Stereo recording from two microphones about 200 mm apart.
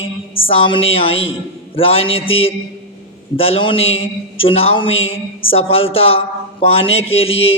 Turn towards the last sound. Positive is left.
turn(degrees=30)  # may be behind; listen again after turning